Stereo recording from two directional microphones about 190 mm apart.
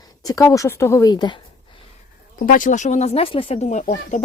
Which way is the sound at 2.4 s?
45° left (ahead or behind).